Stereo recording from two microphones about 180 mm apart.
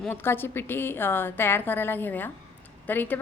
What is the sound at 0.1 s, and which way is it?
A woman's voice, 10° left (ahead or behind).